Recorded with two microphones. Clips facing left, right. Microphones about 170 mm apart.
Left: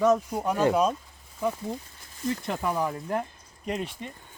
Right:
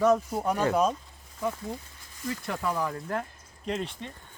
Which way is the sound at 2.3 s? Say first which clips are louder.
Left 2 dB; 20° left (ahead or behind).